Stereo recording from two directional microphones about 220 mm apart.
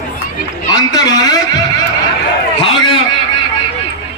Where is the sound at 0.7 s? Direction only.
15° left (ahead or behind).